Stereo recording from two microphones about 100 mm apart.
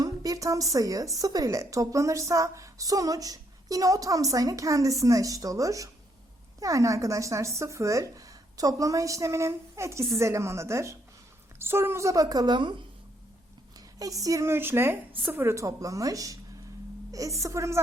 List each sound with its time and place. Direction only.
0.0 s a sound: 40° right (ahead or behind)
0.7 s a woman's voice: 35° right (ahead or behind); by 12.7 s 50° right (ahead or behind)
14.0 s a woman's voice: 35° right (ahead or behind)